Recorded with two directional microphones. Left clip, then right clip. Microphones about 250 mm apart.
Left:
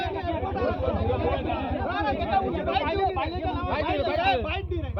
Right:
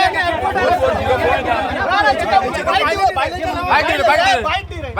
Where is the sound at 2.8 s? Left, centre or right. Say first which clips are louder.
Right 11 dB; right.